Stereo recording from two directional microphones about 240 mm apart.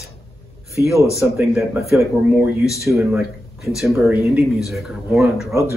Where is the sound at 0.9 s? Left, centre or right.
Centre.